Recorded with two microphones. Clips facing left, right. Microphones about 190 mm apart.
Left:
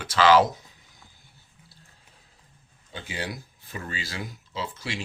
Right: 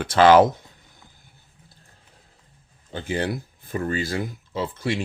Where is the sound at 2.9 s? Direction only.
50° right (ahead or behind).